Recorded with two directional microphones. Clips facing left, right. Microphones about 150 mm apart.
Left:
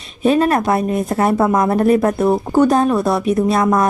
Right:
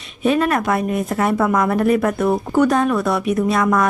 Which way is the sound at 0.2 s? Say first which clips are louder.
Left 3 dB; 35° left (ahead or behind).